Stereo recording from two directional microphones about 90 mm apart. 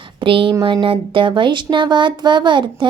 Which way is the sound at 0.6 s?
75° right (ahead or behind).